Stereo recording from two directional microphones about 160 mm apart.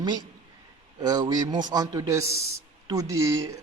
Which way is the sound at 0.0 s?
25° right (ahead or behind).